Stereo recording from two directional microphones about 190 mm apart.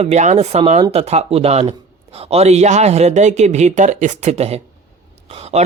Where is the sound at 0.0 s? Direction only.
35° right (ahead or behind).